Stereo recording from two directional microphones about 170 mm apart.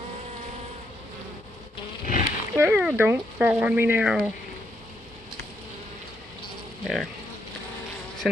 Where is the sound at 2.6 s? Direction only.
10° right (ahead or behind).